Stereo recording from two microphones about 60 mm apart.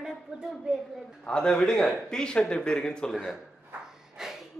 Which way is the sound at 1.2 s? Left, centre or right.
Centre.